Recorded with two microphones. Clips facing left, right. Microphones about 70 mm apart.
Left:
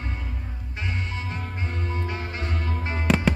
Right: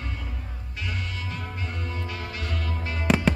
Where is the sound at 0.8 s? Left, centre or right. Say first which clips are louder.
Left 2 dB; left.